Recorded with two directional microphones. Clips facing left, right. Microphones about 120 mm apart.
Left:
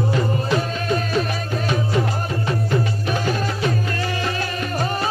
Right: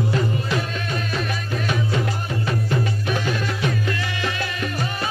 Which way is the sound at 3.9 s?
40° left (ahead or behind).